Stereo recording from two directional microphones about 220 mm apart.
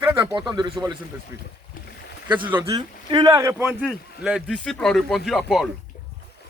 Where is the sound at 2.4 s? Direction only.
10° right (ahead or behind).